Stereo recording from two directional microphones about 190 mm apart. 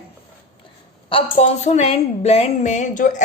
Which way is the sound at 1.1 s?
35° left (ahead or behind).